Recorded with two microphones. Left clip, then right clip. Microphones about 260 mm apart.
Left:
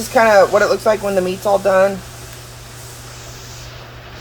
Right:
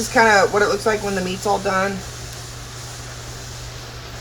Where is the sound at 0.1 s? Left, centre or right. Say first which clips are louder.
Left 4 dB; left.